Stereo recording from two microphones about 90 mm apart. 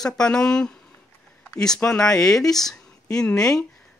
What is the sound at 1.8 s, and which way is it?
Speech, 25° left (ahead or behind).